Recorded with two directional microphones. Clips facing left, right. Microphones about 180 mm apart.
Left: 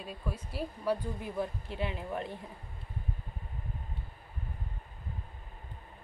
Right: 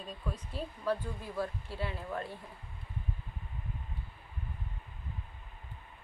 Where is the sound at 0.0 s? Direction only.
10° left (ahead or behind).